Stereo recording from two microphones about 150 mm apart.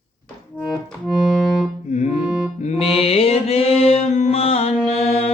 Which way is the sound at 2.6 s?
40° left (ahead or behind).